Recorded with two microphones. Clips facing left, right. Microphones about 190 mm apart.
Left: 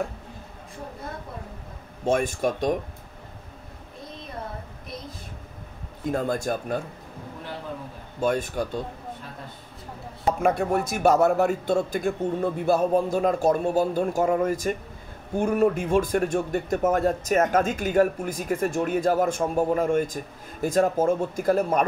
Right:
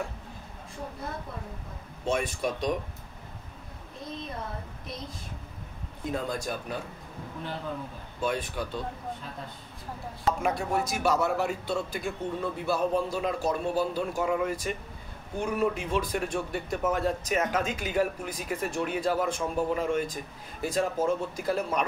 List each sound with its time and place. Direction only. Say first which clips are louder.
2.0 s a man's voice: left 5 dB; 45° left (ahead or behind)
6.0 s a man's voice: left 6 dB; 50° left (ahead or behind)
8.2 s a man's voice: left 6 dB; 45° left (ahead or behind)
10.4 s a man's voice: left 6 dB; 55° left (ahead or behind)